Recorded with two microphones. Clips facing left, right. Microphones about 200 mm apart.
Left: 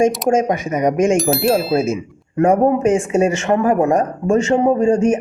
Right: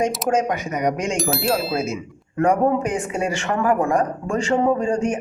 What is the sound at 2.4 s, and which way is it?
A man's voice, 25° left (ahead or behind).